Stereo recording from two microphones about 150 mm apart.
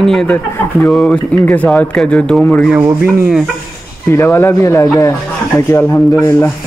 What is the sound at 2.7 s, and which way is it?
Rub, 15° right (ahead or behind).